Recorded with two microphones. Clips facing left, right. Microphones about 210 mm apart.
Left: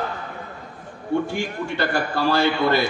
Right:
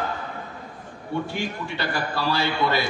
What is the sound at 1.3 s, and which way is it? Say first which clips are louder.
A man's voice: left 3 dB; 50° left (ahead or behind).